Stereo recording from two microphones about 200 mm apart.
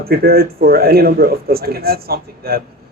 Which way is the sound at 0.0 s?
50° right (ahead or behind).